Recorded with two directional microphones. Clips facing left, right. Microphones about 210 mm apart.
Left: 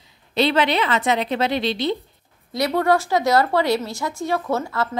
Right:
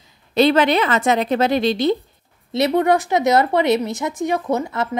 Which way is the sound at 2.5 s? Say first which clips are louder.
Right 3 dB; 20° right (ahead or behind).